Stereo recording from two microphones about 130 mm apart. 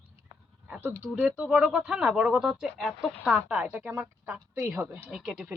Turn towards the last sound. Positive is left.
turn(degrees=-5)  # may be behind; listen again after turning